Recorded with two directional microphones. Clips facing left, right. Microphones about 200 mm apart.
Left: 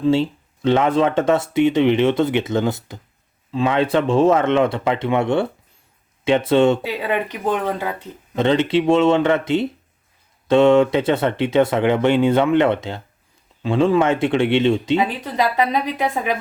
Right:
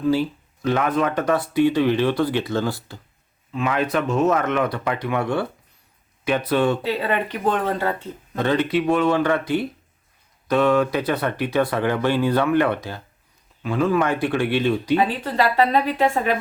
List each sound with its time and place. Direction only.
0.0 s speech: 25° left (ahead or behind)
6.8 s speech: 10° left (ahead or behind)
8.4 s speech: 25° left (ahead or behind)
15.2 s speech: 15° left (ahead or behind)